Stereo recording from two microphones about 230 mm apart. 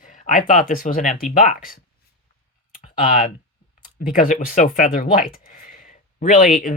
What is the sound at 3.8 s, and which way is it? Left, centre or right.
Speech, left.